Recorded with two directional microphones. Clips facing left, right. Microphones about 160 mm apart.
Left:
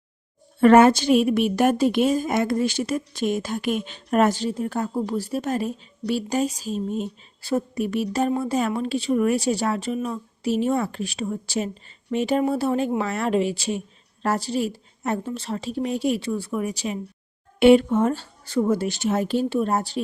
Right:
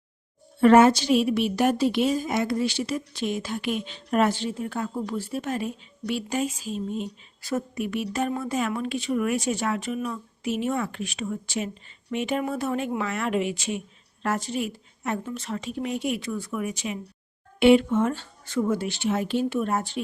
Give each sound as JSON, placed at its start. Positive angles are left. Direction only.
{"t": 0.6, "sound": "a woman's voice", "side_deg": 55}